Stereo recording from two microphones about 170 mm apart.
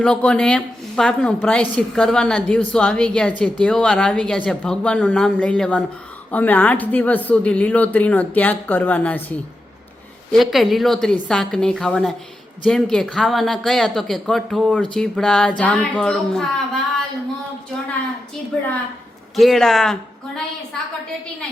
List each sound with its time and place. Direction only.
0.0 s a woman's voice: 5° left (ahead or behind)
19.4 s a woman's voice: centre (ahead or behind)